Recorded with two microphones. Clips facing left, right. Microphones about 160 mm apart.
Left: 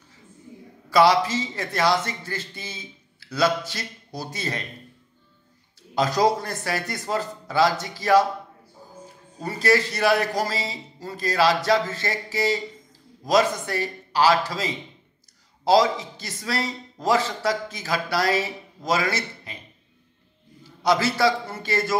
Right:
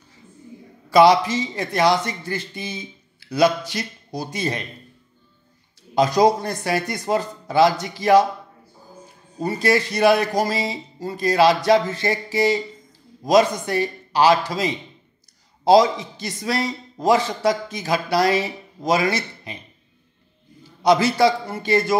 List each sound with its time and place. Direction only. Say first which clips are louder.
0.8 s a man's voice: right 4 dB; 15° right (ahead or behind)
5.9 s a man's voice: right 4 dB; 15° right (ahead or behind)
9.4 s a man's voice: right 2 dB; 15° right (ahead or behind)
20.8 s a man's voice: right 4 dB; 20° right (ahead or behind)